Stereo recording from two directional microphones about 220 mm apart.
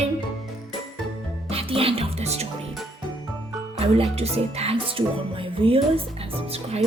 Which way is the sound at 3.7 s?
25° right (ahead or behind).